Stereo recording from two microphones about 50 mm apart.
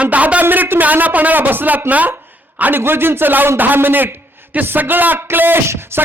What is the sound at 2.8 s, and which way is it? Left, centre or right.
Speech, right.